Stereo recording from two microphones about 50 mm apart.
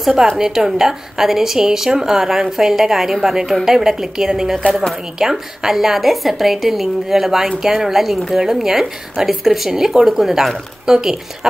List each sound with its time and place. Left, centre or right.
0.0 s a woman's voice: centre
4.6 s a woman's voice: left
5.2 s a woman's voice: centre